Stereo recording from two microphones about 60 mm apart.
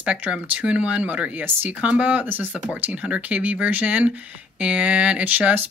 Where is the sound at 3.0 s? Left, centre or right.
Right.